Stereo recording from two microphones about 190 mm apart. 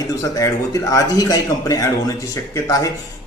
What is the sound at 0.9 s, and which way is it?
Speech, 20° left (ahead or behind).